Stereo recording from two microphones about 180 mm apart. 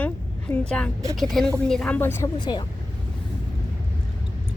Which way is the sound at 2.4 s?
25° left (ahead or behind).